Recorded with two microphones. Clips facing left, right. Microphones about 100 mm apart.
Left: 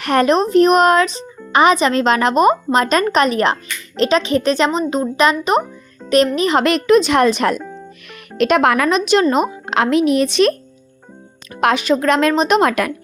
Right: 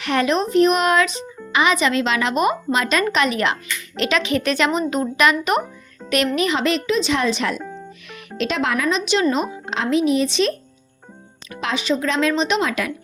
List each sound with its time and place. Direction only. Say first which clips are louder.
0.0 s speech: left 5 dB; 45° left (ahead or behind); by 5.6 s 30° left (ahead or behind)
6.0 s music: left 5 dB; 5° right (ahead or behind)
6.3 s speech: left 4 dB; 35° left (ahead or behind)
6.6 s speech: left 7 dB; 55° left (ahead or behind)
9.6 s speech: left 3 dB; 65° left (ahead or behind)
11.6 s speech: left 7 dB; 55° left (ahead or behind)